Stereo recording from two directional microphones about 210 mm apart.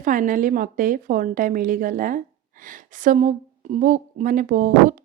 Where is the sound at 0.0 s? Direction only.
40° right (ahead or behind).